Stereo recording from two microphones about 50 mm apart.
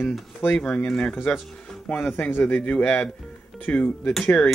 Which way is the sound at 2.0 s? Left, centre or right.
Left.